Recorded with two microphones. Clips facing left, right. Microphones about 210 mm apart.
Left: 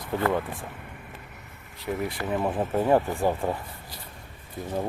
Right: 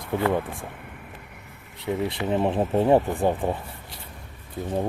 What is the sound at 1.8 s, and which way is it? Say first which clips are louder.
Speech: right 3 dB; 25° right (ahead or behind).